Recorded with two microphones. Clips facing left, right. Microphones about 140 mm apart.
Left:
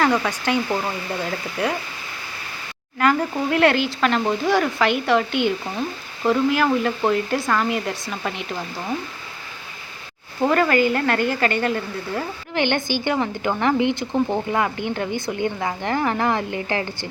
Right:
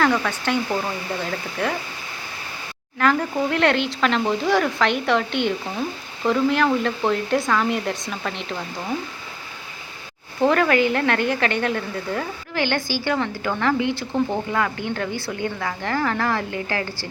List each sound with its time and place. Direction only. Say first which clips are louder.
0.0 s speech: left 1 dB; 10° left (ahead or behind)
3.0 s speech: even; 5° left (ahead or behind)
10.4 s speech: even; centre (ahead or behind)
12.5 s a woman's voice: left 2 dB; 20° left (ahead or behind)